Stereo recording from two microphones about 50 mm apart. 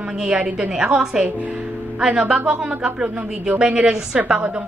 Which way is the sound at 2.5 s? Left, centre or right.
Right.